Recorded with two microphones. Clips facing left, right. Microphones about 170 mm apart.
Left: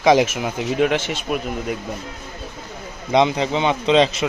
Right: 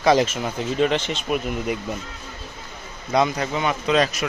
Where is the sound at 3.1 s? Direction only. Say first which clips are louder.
Left 4 dB; 20° left (ahead or behind).